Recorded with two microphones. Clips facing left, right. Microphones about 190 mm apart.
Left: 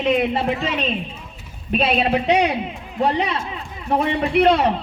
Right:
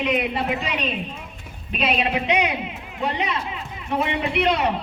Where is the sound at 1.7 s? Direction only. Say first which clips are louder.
Left 5 dB; 35° left (ahead or behind).